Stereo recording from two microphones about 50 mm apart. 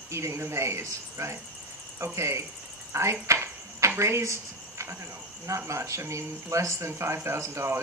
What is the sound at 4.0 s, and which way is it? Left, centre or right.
Speech, right.